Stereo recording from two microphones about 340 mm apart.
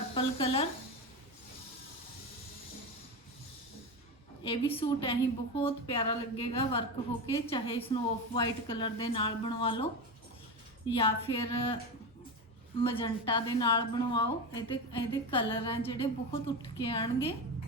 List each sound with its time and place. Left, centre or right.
0.1 s speech: centre
4.4 s a woman's voice: centre
10.9 s a woman's voice: centre
12.8 s a woman's voice: centre